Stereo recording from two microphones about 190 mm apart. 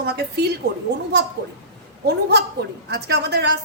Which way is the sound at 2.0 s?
60° right (ahead or behind).